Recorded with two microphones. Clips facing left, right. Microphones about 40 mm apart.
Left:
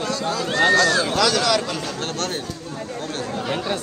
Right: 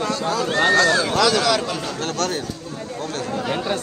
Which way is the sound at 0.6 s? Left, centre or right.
Right.